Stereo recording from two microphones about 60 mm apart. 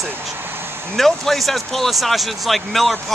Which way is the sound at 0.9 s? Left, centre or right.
Centre.